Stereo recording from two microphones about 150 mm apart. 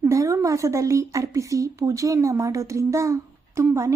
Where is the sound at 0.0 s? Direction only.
20° right (ahead or behind).